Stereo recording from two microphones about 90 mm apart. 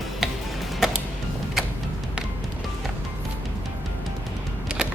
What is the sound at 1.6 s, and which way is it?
Vehicle, 5° right (ahead or behind).